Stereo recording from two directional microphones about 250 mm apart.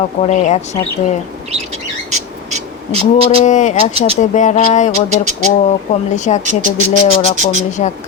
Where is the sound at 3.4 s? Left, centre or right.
Left.